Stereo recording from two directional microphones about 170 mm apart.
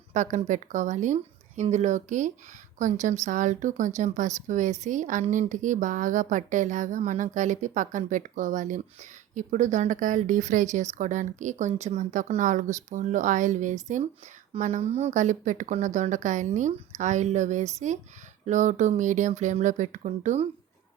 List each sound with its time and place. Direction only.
0.1 s speech: 45° right (ahead or behind)